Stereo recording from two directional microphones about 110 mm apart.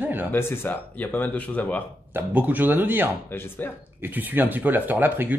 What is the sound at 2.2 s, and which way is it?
Speech, 15° right (ahead or behind).